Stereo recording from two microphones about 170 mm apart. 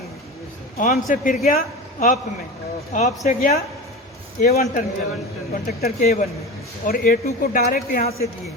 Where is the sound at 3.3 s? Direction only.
50° left (ahead or behind).